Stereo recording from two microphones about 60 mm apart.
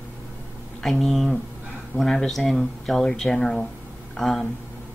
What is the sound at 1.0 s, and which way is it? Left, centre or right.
Speech, centre.